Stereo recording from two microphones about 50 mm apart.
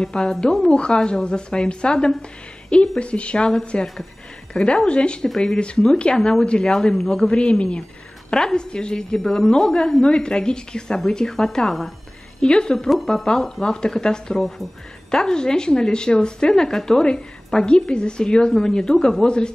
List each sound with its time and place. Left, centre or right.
0.0 s a woman's voice: centre
12.4 s a woman's voice: centre
12.9 s a woman's voice: centre